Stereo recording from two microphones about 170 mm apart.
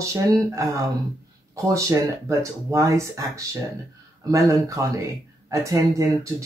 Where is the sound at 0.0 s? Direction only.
20° right (ahead or behind).